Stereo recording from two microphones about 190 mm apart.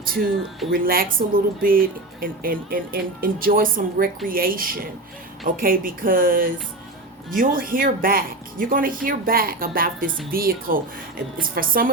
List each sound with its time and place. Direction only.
0.0 s speech: 50° right (ahead or behind)